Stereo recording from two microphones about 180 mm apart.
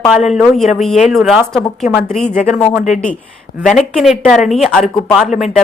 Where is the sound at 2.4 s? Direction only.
40° left (ahead or behind).